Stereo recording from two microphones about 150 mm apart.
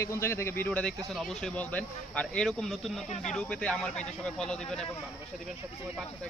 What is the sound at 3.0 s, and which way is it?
Speech, 50° left (ahead or behind).